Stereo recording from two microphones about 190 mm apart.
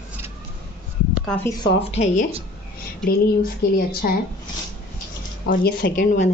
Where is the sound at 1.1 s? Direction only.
5° left (ahead or behind).